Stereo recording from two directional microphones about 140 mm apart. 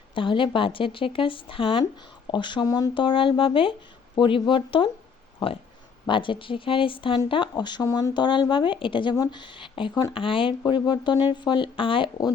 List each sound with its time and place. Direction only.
0.1 s speech: 35° left (ahead or behind)